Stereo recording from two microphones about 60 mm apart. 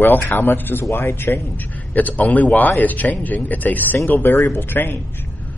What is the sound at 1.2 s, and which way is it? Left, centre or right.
A man's voice, left.